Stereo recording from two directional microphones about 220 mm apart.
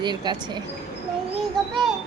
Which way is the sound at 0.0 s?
20° right (ahead or behind).